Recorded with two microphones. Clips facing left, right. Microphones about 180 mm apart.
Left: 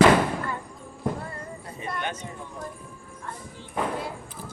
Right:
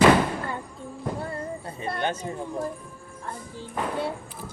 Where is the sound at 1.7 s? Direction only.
30° right (ahead or behind).